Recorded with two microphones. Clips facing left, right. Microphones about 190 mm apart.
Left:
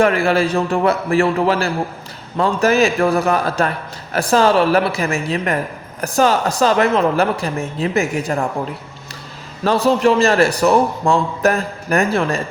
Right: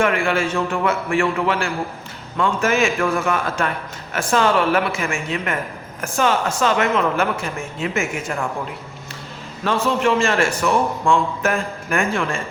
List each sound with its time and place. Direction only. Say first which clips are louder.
0.0 s a man's voice: left 4 dB; 35° left (ahead or behind)
9.6 s a man's voice: left 5 dB; 35° left (ahead or behind)